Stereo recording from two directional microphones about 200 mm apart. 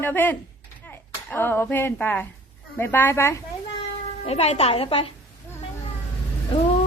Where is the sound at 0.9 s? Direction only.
10° left (ahead or behind).